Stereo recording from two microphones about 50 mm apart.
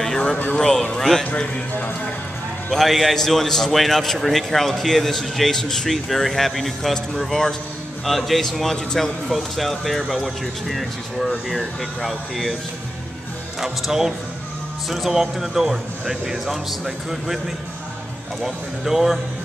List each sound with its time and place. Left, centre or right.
0.6 s a man's voice: centre
1.2 s a man's voice: left
2.7 s a man's voice: centre
13.6 s a man's voice: centre
18.4 s a man's voice: centre